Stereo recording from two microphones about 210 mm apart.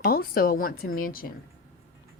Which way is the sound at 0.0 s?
45° left (ahead or behind).